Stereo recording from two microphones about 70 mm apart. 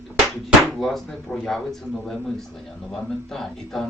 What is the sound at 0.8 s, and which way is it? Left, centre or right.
Speech, centre.